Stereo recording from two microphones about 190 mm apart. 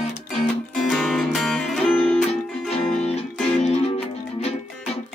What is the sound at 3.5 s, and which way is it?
Music, 35° left (ahead or behind).